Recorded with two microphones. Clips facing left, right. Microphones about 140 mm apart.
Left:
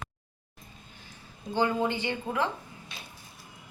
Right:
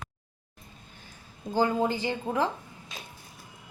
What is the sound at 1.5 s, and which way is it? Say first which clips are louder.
Speech: right 2 dB; 35° right (ahead or behind).